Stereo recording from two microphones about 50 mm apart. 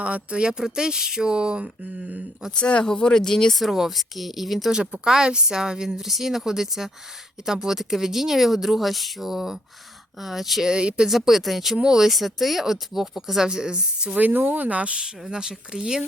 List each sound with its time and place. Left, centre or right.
0.0 s speech: right
2.5 s speech: left
3.5 s speech: centre
4.7 s speech: centre
10.7 s speech: centre
11.1 s speech: centre
14.1 s speech: right
15.0 s speech: centre